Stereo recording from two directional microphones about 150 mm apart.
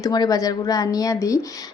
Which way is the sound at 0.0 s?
25° left (ahead or behind).